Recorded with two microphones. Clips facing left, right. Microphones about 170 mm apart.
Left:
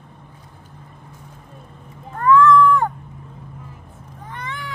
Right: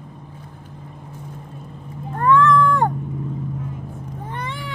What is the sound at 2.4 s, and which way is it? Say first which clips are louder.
Cat: left 4 dB; 30° right (ahead or behind).